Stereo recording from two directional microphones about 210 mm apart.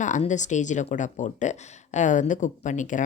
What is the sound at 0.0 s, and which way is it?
Speech, 35° left (ahead or behind).